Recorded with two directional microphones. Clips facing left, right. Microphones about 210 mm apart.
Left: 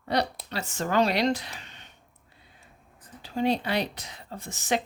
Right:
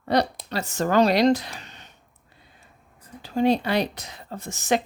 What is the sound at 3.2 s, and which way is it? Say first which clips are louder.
A woman's voice: right 5 dB; 45° right (ahead or behind).